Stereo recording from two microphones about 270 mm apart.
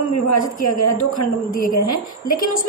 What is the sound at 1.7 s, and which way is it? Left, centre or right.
Speech, left.